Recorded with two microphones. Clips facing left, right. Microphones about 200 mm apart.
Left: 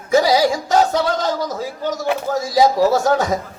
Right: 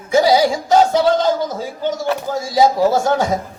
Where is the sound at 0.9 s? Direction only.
25° right (ahead or behind).